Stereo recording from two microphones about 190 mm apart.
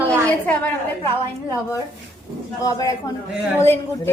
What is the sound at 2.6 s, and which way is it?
A woman's voice, 15° left (ahead or behind).